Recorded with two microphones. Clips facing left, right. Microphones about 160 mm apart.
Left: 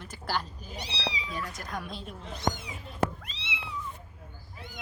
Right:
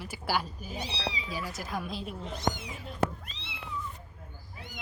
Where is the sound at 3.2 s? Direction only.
90° left.